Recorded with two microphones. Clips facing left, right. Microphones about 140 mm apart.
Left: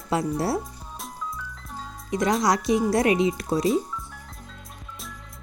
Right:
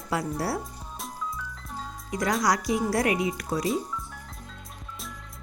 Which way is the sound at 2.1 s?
20° left (ahead or behind).